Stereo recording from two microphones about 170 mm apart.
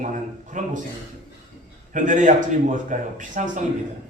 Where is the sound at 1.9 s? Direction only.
50° right (ahead or behind).